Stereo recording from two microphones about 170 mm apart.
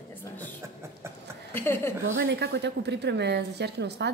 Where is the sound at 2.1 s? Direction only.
75° right (ahead or behind).